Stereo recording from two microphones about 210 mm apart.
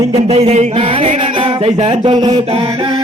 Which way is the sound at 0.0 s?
25° right (ahead or behind).